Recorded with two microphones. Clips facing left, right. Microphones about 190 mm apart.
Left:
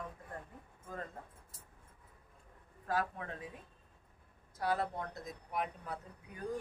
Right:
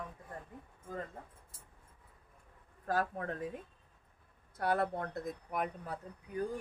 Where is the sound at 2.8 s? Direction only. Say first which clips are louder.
Right 2 dB; 45° right (ahead or behind).